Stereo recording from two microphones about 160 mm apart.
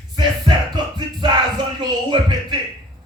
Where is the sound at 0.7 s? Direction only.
25° right (ahead or behind).